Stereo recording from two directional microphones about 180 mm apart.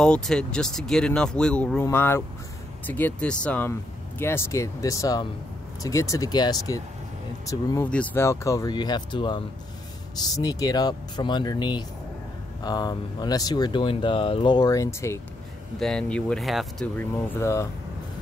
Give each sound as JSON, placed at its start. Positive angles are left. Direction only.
{"t": 0.0, "sound": "speech", "side_deg": 5}
{"t": 15.8, "sound": "speech", "side_deg": 5}